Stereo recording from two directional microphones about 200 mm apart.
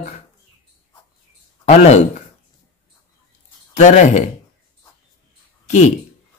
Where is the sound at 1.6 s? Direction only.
35° left (ahead or behind).